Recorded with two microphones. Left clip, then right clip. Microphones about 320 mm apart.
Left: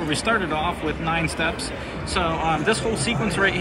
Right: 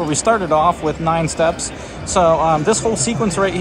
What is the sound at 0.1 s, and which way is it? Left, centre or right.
Speech, centre.